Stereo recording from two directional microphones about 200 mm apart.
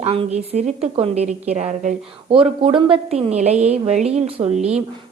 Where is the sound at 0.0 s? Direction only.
30° right (ahead or behind).